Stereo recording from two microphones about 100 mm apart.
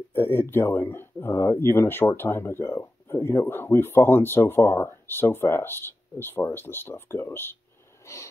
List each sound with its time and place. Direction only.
0.1 s speech: 20° left (ahead or behind)